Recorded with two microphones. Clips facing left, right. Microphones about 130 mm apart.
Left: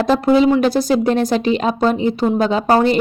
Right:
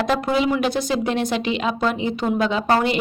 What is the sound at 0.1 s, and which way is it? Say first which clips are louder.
A woman's voice: left 10 dB; 35° left (ahead or behind).